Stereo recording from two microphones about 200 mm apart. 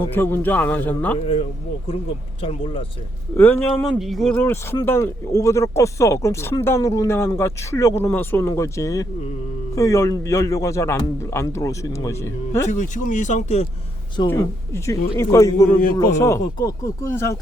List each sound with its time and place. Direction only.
0.1 s speech: 10° left (ahead or behind)
2.4 s speech: 25° left (ahead or behind)
3.3 s speech: 10° left (ahead or behind)
12.6 s speech: 40° left (ahead or behind)
14.3 s speech: 15° left (ahead or behind)